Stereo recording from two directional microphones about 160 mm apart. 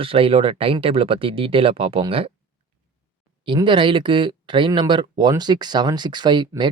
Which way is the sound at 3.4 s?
30° right (ahead or behind).